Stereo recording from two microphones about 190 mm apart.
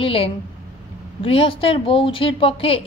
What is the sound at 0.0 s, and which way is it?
A woman's voice, 30° left (ahead or behind).